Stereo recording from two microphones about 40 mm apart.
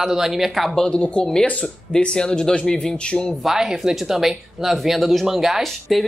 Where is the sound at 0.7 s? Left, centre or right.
Centre.